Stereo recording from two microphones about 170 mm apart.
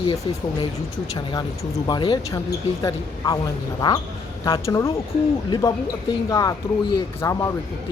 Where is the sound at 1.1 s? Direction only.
25° left (ahead or behind).